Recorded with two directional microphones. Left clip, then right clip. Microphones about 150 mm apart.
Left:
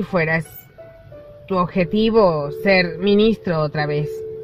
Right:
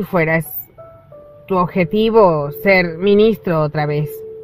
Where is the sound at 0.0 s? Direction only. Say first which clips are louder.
Right 3 dB; 50° right (ahead or behind).